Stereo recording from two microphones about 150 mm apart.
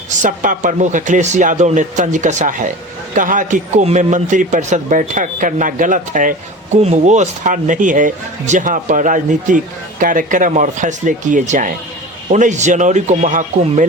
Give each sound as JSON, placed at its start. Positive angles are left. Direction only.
{"t": 0.2, "sound": "a man's voice", "side_deg": -60}
{"t": 6.7, "sound": "a man's voice", "side_deg": -50}